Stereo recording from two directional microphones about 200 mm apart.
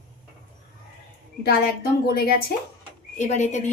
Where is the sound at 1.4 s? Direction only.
50° left (ahead or behind).